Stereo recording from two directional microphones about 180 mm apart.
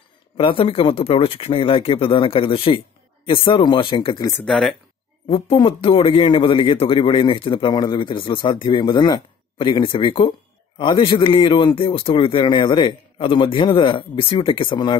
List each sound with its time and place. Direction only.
0.4 s a man's voice: 30° left (ahead or behind)
4.5 s speech: centre (ahead or behind)
5.3 s a man's voice: 30° left (ahead or behind)